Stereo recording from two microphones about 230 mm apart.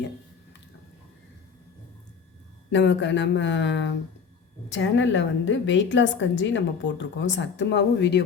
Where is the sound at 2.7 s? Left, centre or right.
Left.